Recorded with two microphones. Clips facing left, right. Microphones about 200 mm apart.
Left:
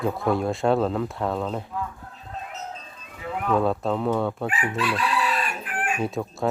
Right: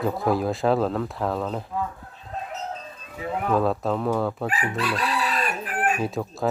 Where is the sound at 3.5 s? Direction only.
Centre (ahead or behind).